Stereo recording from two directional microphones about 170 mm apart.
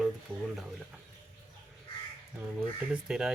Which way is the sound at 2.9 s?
5° right (ahead or behind).